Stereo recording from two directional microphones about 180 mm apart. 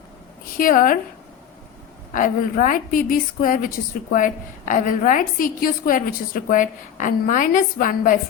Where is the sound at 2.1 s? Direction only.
45° left (ahead or behind).